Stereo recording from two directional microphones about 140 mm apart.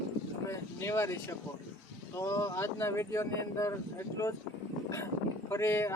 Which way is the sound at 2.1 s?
20° left (ahead or behind).